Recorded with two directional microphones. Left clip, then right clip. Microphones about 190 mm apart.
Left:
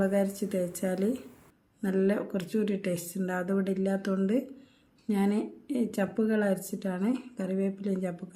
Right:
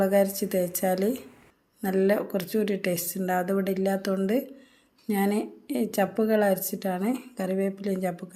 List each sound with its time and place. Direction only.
0.0 s speech: 10° left (ahead or behind)